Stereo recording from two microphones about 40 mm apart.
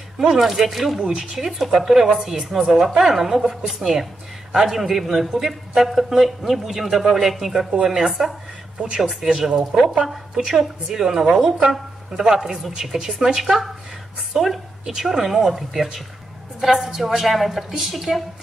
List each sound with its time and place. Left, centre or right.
0.4 s speech: centre
1.0 s speech: right
1.3 s speech: centre
8.7 s speech: right
9.1 s a woman's voice: centre